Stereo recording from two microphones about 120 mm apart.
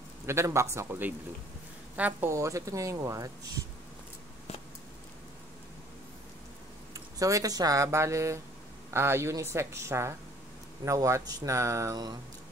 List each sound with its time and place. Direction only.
0.3 s speech: 20° right (ahead or behind)
6.9 s speech: 30° right (ahead or behind)